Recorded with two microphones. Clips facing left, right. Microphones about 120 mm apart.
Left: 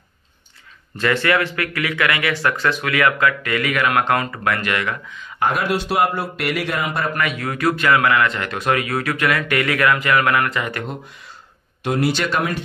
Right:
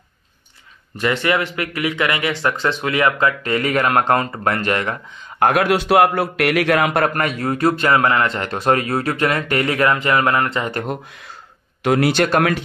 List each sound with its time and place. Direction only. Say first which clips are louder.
0.9 s speech: even; 15° right (ahead or behind); by 4.9 s 35° right (ahead or behind)
5.4 s a man's voice: right 4 dB; 65° right (ahead or behind)
7.2 s speech: right 3 dB; 40° right (ahead or behind)
11.8 s speech: right 4 dB; 80° right; by 12.4 s 55° right (ahead or behind)